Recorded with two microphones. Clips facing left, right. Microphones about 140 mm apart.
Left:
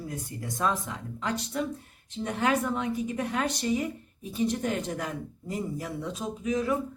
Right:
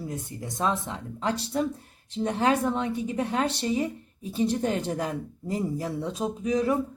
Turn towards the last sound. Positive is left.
turn(degrees=-35)  # may be behind; listen again after turning